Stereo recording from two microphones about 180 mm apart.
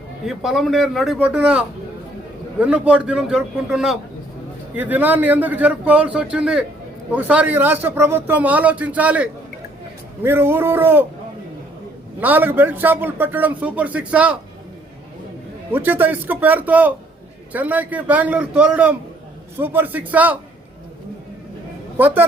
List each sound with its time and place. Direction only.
0.3 s a man's voice: centre (ahead or behind)
12.2 s speech: 10° right (ahead or behind)
15.7 s speech: 10° right (ahead or behind)
21.9 s speech: 10° right (ahead or behind)